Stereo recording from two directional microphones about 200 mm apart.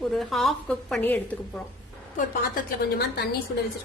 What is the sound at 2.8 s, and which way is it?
Speech, 55° left (ahead or behind).